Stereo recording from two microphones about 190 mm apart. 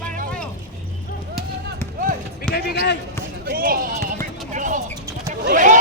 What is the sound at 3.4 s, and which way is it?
Basketball bounce, 50° right (ahead or behind).